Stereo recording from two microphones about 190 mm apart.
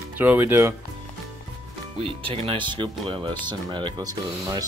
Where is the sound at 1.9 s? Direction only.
30° right (ahead or behind).